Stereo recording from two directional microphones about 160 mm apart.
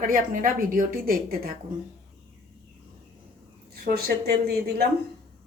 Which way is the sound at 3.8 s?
80° right.